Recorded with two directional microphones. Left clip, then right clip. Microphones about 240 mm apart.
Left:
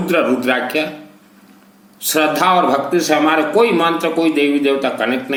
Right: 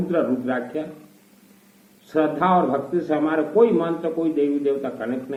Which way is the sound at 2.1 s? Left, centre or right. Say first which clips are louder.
Left 6 dB; left.